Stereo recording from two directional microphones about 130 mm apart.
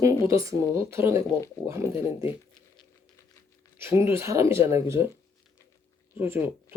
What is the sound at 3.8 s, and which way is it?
Speech, 20° right (ahead or behind).